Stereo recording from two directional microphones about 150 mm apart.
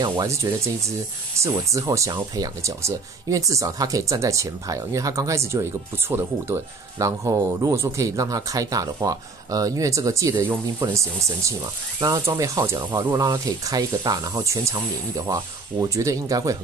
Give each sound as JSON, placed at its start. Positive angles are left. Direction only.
{"t": 0.2, "sound": "speech", "side_deg": -20}